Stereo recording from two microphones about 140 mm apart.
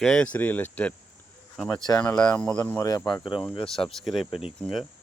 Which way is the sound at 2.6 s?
20° left (ahead or behind).